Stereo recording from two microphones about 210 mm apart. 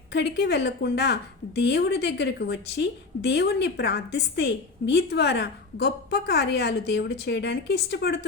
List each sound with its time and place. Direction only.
0.1 s a woman's voice: 50° left (ahead or behind)